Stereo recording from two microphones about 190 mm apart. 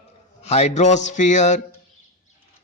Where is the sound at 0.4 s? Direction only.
35° left (ahead or behind).